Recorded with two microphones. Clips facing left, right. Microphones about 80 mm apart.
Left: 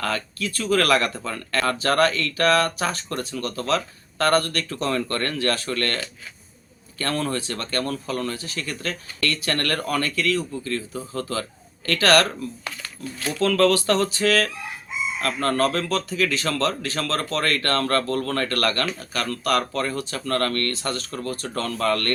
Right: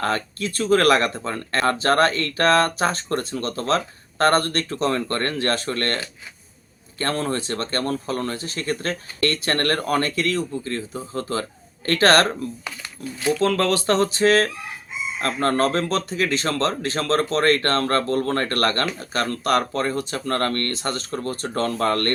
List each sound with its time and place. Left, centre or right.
0.0 s speech: right
12.8 s speech: centre; by 22.1 s right